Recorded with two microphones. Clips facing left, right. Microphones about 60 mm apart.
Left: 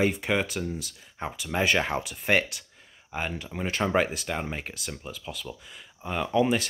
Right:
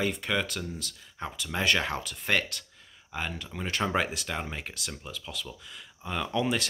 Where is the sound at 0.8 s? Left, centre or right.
Centre.